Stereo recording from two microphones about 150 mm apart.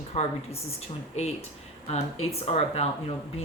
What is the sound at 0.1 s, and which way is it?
Speech, 45° left (ahead or behind).